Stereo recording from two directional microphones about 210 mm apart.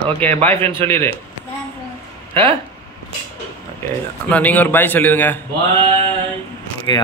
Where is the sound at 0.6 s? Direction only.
25° right (ahead or behind).